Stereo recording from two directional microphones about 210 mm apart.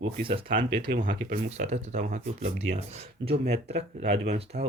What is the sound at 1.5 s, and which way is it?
Speech, 30° right (ahead or behind).